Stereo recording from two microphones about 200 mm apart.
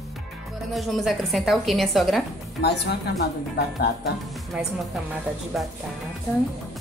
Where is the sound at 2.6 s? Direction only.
55° left (ahead or behind).